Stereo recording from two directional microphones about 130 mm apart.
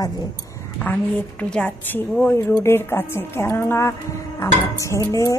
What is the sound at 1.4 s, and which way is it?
A woman's voice, 10° left (ahead or behind).